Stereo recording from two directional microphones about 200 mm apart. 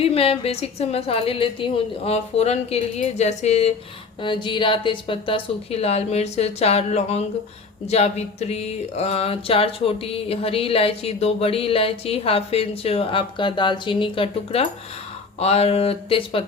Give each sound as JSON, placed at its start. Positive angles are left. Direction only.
{"t": 0.0, "sound": "a woman's voice", "side_deg": 30}
{"t": 4.2, "sound": "music", "side_deg": 25}